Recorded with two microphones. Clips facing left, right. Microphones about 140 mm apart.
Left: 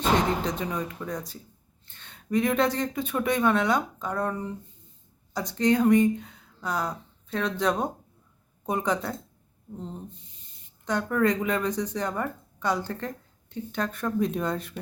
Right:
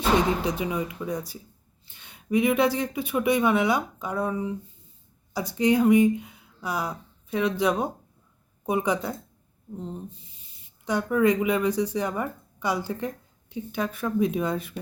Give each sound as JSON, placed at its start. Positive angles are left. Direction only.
{"t": 0.4, "sound": "speech", "side_deg": -10}